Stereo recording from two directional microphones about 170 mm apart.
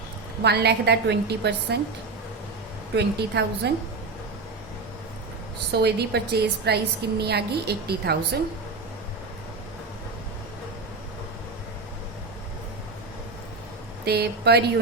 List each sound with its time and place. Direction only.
0.4 s a woman's voice: 75° right (ahead or behind)
2.9 s a woman's voice: 80° right
5.8 s a woman's voice: 75° right (ahead or behind)
14.0 s a woman's voice: 70° right (ahead or behind)